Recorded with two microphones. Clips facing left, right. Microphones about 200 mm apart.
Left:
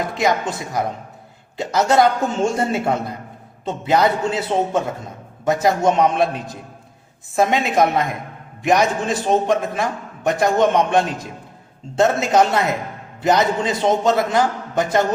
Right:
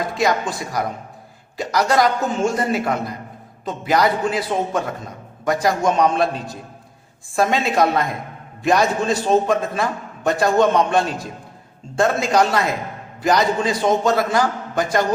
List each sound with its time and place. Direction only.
0.1 s a man's voice: 20° left (ahead or behind)